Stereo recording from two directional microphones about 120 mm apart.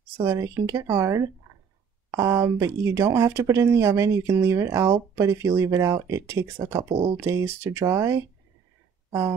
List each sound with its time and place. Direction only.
0.2 s speech: 25° right (ahead or behind)